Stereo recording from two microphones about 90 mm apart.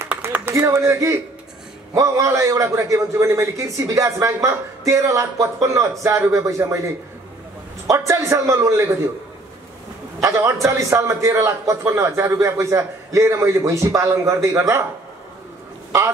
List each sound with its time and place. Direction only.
0.5 s a man's voice: 35° right (ahead or behind)
7.9 s a man's voice: 35° right (ahead or behind)
10.2 s a man's voice: 35° right (ahead or behind)